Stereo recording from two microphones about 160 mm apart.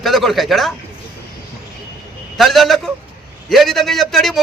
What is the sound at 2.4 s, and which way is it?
A man's voice, centre (ahead or behind).